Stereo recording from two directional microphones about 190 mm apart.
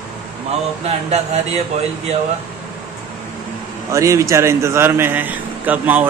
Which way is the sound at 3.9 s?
15° right (ahead or behind).